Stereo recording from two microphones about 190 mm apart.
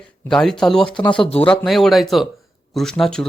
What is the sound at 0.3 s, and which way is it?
Speech, 5° left (ahead or behind).